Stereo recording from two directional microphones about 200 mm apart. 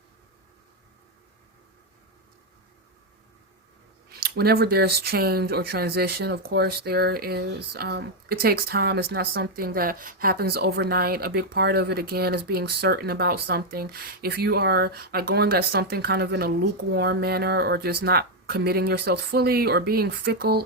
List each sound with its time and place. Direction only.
4.1 s speech: 50° right (ahead or behind)